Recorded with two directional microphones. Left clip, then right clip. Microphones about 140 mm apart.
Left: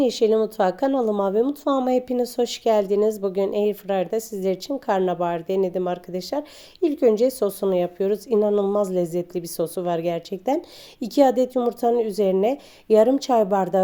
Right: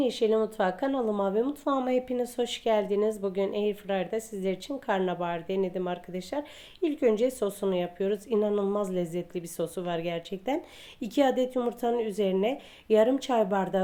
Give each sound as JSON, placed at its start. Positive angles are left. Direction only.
{"t": 0.0, "sound": "speech", "side_deg": 55}